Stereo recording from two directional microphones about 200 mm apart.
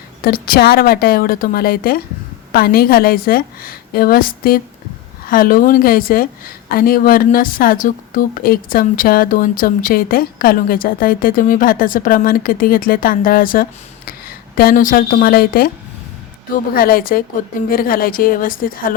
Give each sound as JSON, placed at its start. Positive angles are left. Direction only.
{"t": 0.2, "sound": "a woman's voice", "side_deg": 50}
{"t": 16.7, "sound": "a woman's voice", "side_deg": 45}